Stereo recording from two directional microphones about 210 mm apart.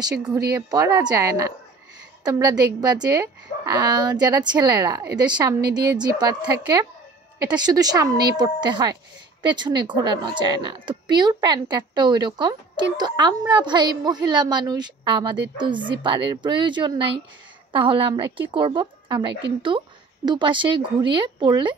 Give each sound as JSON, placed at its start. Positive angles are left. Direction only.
{"t": 0.7, "sound": "a woman's voice", "side_deg": -15}
{"t": 7.3, "sound": "speech", "side_deg": -20}